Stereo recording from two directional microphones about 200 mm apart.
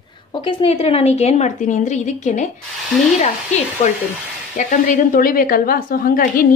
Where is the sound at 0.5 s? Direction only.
25° left (ahead or behind).